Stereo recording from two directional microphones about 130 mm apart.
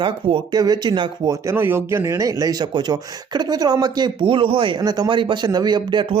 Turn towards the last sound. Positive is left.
turn(degrees=-35)  # may be behind; listen again after turning